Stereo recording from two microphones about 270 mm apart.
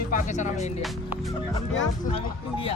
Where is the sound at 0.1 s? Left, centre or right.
Left.